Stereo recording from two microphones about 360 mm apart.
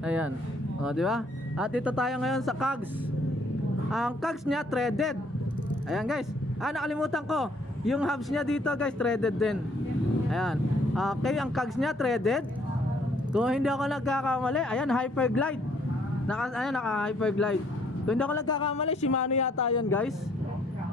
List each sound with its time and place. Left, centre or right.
0.0 s a man's voice: centre
3.9 s a man's voice: centre